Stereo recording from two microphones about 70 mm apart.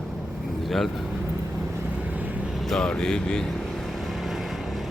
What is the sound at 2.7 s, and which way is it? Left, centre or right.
Speech, centre.